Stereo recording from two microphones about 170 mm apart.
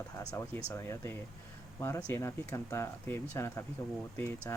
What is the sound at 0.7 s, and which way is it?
Speech, 15° left (ahead or behind).